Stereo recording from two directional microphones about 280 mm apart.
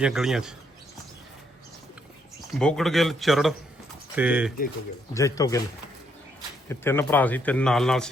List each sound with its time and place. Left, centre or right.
0.0 s a man's voice: centre
2.5 s a man's voice: centre
5.1 s speech: centre
6.7 s a man's voice: centre